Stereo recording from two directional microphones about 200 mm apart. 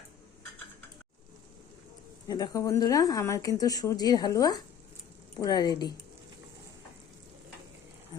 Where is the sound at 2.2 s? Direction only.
20° left (ahead or behind).